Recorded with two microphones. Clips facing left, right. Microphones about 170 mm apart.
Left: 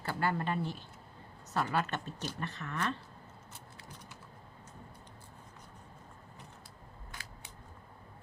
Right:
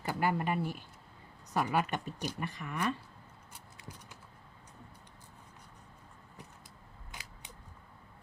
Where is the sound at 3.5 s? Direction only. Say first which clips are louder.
Right 3 dB; 10° right (ahead or behind).